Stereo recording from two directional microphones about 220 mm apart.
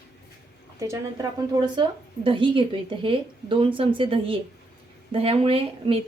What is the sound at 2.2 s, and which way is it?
A woman's voice, 25° right (ahead or behind).